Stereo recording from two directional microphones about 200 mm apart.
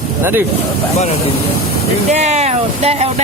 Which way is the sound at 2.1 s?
35° right (ahead or behind).